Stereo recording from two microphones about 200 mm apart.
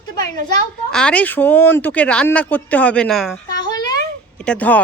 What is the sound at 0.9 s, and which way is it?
Speech, 5° left (ahead or behind).